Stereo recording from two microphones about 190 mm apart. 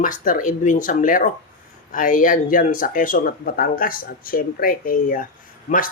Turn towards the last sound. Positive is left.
turn(degrees=45)  # may be behind; listen again after turning